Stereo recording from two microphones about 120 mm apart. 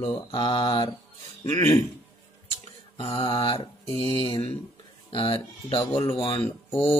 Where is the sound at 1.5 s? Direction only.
25° left (ahead or behind).